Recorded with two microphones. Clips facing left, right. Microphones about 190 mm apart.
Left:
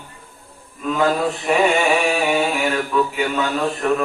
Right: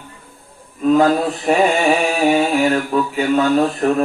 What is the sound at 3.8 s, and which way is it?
Mantra, 40° right (ahead or behind).